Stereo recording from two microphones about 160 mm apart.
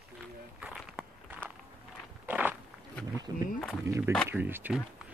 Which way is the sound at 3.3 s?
20° right (ahead or behind).